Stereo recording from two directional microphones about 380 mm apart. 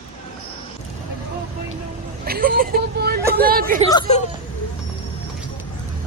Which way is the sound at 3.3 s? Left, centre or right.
Right.